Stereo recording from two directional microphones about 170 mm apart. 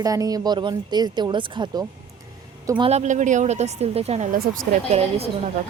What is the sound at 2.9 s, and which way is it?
Speech, 45° right (ahead or behind).